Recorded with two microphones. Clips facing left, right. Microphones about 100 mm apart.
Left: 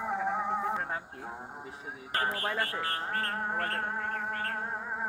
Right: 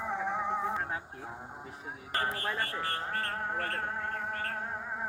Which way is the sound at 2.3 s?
60° left (ahead or behind).